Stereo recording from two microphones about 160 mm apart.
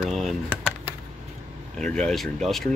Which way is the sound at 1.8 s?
5° left (ahead or behind).